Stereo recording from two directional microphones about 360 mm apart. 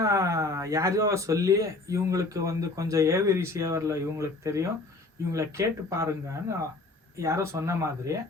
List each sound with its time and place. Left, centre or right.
0.0 s a man's voice: centre
7.2 s a man's voice: centre